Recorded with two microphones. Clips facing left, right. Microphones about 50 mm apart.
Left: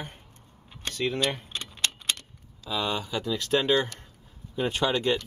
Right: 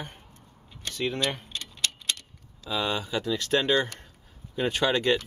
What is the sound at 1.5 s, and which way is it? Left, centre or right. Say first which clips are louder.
Keys jangling: left 1 dB; left.